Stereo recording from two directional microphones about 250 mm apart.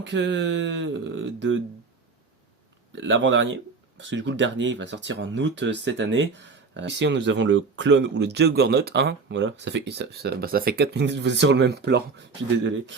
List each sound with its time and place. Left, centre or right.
0.0 s speech: right
2.9 s speech: right